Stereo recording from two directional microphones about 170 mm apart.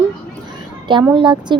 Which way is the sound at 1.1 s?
25° right (ahead or behind).